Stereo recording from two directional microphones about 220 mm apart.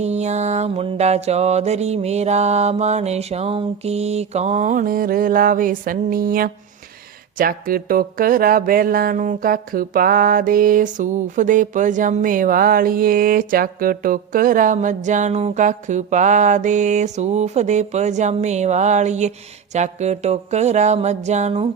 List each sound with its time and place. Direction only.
0.0 s mantra: 30° right (ahead or behind)
7.3 s speech: 40° right (ahead or behind)